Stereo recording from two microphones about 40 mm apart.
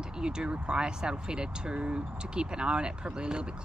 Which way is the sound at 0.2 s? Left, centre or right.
Right.